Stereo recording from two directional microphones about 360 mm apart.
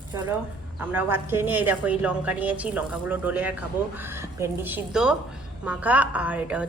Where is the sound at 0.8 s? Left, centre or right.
Centre.